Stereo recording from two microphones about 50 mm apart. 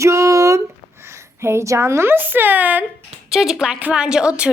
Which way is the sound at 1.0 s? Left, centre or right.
Right.